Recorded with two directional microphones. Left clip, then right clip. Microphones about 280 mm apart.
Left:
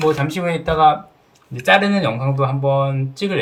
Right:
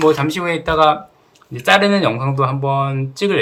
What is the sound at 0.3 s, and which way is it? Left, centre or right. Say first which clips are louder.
Speech: right 2 dB; centre.